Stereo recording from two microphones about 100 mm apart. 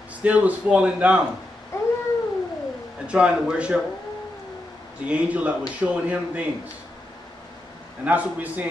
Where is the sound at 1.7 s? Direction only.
30° left (ahead or behind).